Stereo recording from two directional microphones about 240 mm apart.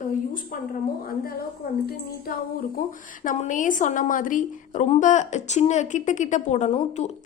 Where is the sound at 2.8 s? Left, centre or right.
Left.